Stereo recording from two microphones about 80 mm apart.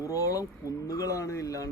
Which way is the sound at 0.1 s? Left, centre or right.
Left.